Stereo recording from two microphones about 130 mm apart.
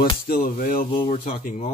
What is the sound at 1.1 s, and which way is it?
Speech, 60° left (ahead or behind).